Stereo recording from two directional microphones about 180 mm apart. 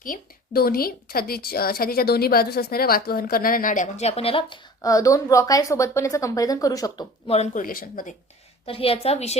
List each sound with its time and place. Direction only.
0.0 s a woman's voice: 55° left (ahead or behind); by 7.1 s 20° left (ahead or behind)
7.3 s a woman's voice: 35° left (ahead or behind)
8.6 s a woman's voice: 30° left (ahead or behind)